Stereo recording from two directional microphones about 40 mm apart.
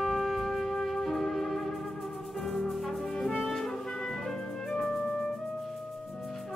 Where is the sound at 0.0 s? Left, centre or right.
Centre.